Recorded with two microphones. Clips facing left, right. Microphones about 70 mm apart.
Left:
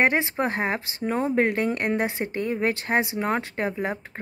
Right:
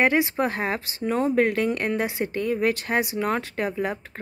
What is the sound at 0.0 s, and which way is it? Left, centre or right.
Speech, left.